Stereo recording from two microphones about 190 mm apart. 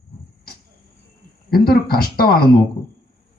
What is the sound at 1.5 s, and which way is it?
Speech, 50° left (ahead or behind).